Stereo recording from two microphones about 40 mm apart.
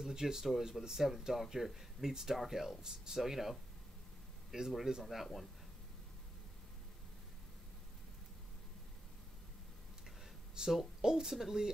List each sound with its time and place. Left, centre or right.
0.0 s speech: centre
4.5 s speech: centre
5.0 s speech: centre
10.5 s a sound: centre
11.0 s speech: centre
11.3 s speech: centre